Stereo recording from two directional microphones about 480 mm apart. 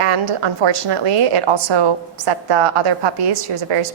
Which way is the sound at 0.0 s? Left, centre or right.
Right.